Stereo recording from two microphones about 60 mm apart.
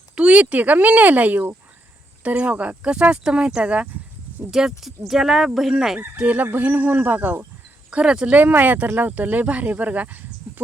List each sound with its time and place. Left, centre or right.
0.2 s speech: centre
4.8 s speech: centre
6.1 s speech: right
7.9 s speech: centre
8.4 s speech: right